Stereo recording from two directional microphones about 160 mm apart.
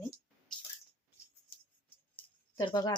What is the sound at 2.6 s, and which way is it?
Speech, 25° left (ahead or behind).